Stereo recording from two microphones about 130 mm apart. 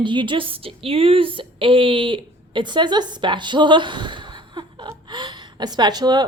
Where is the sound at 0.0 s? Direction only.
40° right (ahead or behind).